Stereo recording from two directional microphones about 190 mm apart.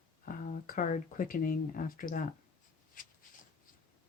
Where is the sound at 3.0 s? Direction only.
45° left (ahead or behind).